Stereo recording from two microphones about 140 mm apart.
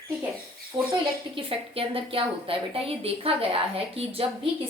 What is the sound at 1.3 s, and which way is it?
A woman's voice, 40° right (ahead or behind).